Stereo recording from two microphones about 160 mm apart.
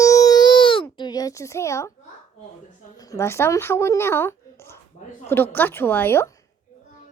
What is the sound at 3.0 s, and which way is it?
Speech, 20° left (ahead or behind).